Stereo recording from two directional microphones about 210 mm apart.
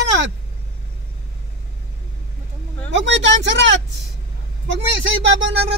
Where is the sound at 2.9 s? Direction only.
60° right (ahead or behind).